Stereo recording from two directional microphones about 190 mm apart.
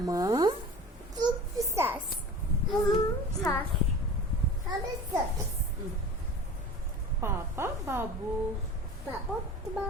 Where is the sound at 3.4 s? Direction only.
15° left (ahead or behind).